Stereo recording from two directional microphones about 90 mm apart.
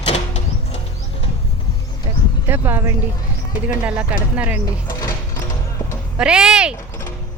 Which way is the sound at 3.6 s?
15° right (ahead or behind).